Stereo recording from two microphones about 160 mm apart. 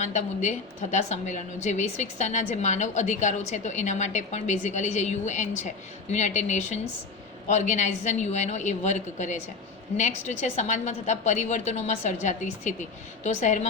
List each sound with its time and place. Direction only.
0.0 s a woman's voice: 50° left (ahead or behind)